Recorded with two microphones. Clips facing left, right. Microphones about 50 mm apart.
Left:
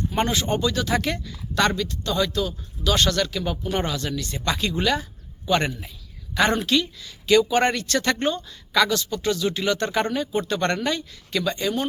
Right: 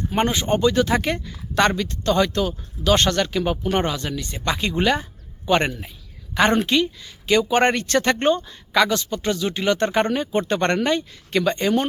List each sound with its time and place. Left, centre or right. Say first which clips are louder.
0.3 s speech: right 4 dB; right
3.8 s a woman's voice: right 2 dB; right